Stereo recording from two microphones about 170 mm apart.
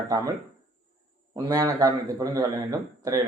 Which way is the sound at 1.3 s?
20° right (ahead or behind).